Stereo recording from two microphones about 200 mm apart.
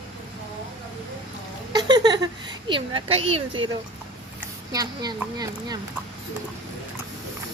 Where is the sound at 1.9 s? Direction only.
20° right (ahead or behind).